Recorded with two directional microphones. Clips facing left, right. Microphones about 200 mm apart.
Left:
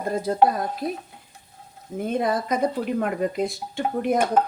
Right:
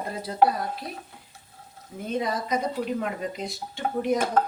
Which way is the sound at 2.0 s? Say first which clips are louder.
Left 4 dB; 55° left (ahead or behind).